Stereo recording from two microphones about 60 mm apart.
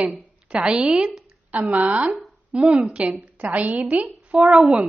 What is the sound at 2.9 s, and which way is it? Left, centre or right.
Speech, right.